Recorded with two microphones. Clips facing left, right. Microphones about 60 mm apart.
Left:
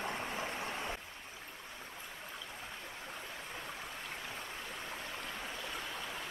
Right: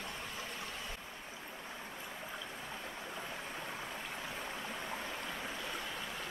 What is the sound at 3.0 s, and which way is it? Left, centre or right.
Stream, centre.